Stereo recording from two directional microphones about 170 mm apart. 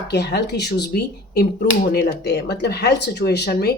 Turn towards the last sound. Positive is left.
turn(degrees=70)  # may be behind; listen again after turning